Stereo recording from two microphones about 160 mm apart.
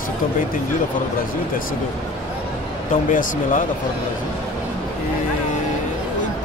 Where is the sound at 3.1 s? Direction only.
55° left (ahead or behind).